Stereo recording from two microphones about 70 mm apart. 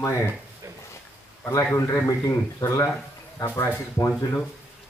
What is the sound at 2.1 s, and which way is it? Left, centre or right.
Speech, left.